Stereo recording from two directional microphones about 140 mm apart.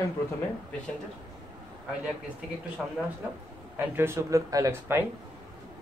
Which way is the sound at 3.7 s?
15° right (ahead or behind).